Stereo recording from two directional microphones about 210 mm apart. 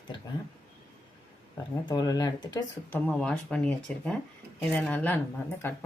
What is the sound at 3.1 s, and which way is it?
Speech, 5° left (ahead or behind).